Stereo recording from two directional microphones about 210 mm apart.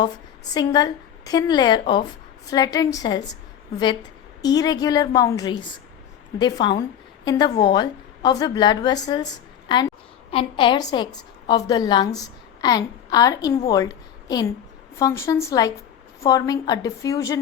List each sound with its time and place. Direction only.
0.5 s a woman's voice: 20° left (ahead or behind)
4.4 s a woman's voice: 20° left (ahead or behind)